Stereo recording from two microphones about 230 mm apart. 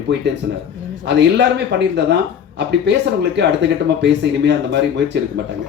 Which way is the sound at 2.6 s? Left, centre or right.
Right.